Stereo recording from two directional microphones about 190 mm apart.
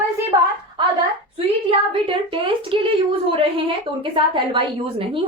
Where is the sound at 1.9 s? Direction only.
25° right (ahead or behind).